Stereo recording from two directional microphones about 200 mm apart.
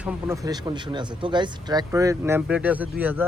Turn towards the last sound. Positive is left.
turn(degrees=-10)  # may be behind; listen again after turning